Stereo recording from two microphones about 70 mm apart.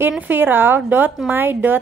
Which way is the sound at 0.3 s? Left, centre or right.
Right.